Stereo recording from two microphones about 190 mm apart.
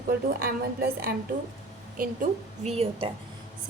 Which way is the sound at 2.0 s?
40° right (ahead or behind).